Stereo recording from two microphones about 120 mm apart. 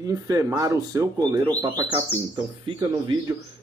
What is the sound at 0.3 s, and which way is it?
Speech, 30° right (ahead or behind).